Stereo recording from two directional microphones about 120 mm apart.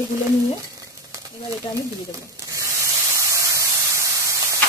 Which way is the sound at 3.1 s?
25° right (ahead or behind).